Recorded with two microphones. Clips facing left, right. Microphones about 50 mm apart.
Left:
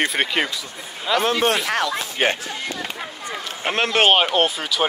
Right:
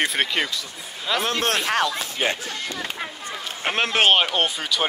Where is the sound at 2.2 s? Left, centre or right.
Left.